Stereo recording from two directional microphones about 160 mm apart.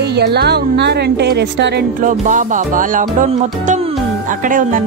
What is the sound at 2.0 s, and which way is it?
Speech, 50° right (ahead or behind).